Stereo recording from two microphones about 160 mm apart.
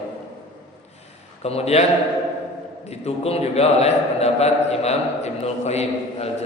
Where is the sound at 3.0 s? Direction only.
40° left (ahead or behind).